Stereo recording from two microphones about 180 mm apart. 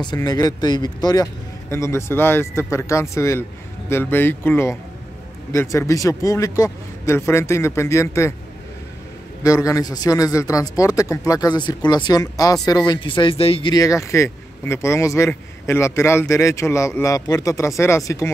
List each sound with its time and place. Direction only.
0.0 s speech: 20° left (ahead or behind)
9.4 s a man's voice: 20° left (ahead or behind)